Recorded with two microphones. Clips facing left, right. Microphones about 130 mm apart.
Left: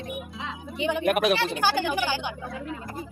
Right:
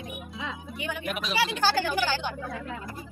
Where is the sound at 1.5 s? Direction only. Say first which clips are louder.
Left 1 dB; 15° left (ahead or behind).